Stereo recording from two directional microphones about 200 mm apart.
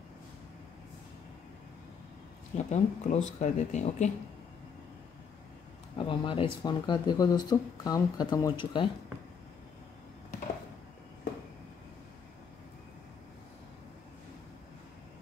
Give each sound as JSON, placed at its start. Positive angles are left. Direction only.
{"t": 2.5, "sound": "speech", "side_deg": 35}
{"t": 5.9, "sound": "speech", "side_deg": 25}